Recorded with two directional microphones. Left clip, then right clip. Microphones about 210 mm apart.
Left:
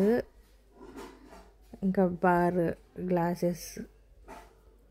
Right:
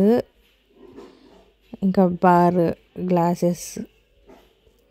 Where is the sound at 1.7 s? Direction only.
35° right (ahead or behind).